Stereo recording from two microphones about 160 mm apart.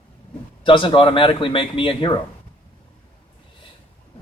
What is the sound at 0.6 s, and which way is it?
Speech, 30° left (ahead or behind).